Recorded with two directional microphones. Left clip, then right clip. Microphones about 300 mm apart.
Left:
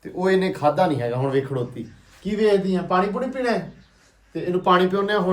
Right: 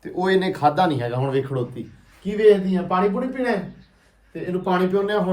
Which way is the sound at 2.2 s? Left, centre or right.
Left.